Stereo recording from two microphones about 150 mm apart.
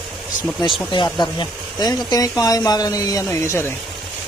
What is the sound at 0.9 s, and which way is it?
A man's voice, 30° left (ahead or behind).